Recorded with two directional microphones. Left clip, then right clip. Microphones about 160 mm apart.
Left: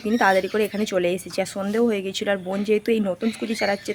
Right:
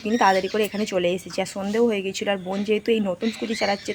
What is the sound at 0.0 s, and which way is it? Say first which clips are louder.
Speech: even; 20° left (ahead or behind).